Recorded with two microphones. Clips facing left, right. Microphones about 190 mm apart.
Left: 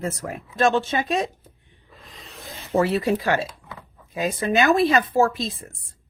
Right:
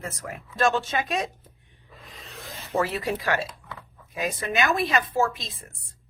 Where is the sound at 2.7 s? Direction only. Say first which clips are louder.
Left 6 dB; 25° left (ahead or behind).